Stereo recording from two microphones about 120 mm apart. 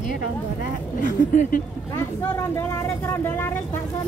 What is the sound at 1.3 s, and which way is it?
Speech, 90° left.